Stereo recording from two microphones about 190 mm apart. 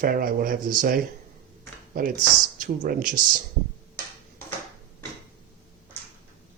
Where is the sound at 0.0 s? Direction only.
50° right (ahead or behind).